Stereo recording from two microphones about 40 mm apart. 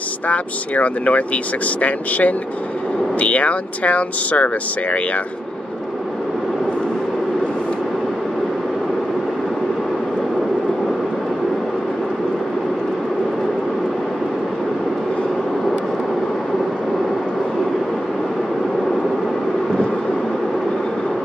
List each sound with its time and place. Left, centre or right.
0.3 s speech: left